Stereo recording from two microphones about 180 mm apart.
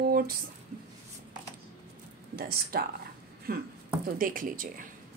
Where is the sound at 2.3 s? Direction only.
55° right (ahead or behind).